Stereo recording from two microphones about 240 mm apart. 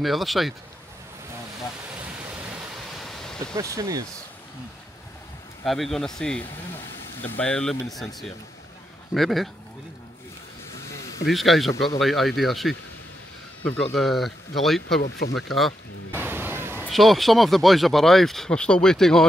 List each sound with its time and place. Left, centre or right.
0.0 s speech: centre
2.0 s waves: centre
3.5 s speech: centre
5.6 s speech: centre
10.7 s a sound: centre
11.2 s speech: centre
13.9 s speech: centre
15.0 s speech: left
15.3 s a sound: centre
16.8 s speech: centre